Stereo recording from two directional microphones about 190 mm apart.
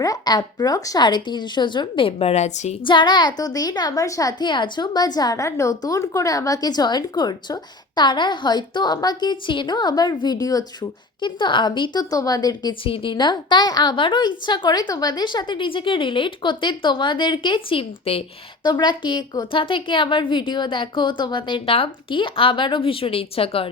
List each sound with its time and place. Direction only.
0.0 s a woman's voice: 20° left (ahead or behind)